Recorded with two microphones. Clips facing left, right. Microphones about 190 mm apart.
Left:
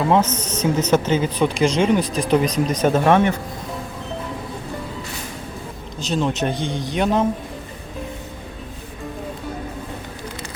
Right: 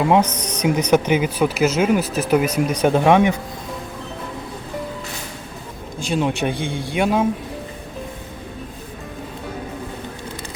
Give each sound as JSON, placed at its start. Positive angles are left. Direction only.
{"t": 0.0, "sound": "speech", "side_deg": -15}
{"t": 6.0, "sound": "speech", "side_deg": -10}